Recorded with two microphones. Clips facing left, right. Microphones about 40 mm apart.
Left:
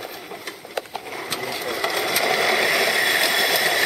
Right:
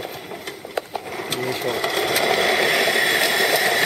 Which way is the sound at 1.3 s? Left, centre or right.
Right.